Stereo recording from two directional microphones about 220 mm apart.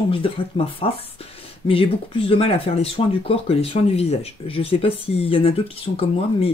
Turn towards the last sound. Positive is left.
turn(degrees=25)  # may be behind; listen again after turning